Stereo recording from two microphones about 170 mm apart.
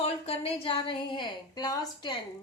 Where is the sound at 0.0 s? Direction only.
35° left (ahead or behind).